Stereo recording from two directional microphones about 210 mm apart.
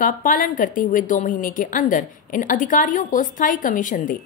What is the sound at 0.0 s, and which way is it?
A woman's voice, 40° left (ahead or behind).